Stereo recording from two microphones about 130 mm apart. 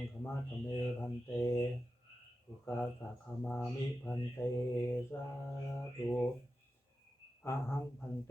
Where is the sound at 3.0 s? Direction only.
25° left (ahead or behind).